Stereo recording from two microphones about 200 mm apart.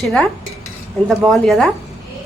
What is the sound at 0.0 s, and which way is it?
Speech, centre (ahead or behind).